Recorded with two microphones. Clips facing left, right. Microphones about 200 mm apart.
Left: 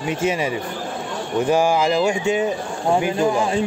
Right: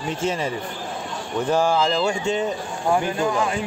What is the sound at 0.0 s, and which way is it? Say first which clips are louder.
Speech: left 3 dB; 10° left (ahead or behind).